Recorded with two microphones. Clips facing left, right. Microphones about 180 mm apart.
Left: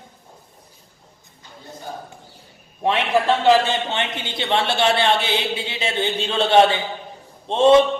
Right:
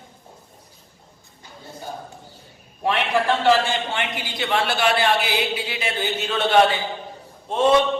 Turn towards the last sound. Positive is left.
turn(degrees=25)  # may be behind; listen again after turning